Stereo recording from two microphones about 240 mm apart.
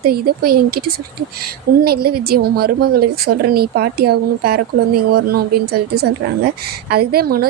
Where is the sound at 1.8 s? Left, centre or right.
Right.